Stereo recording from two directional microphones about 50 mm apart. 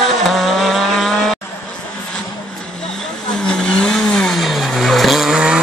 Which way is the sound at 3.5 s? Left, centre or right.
Centre.